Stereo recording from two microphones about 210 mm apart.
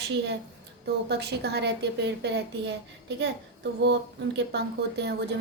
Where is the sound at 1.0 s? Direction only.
50° right (ahead or behind).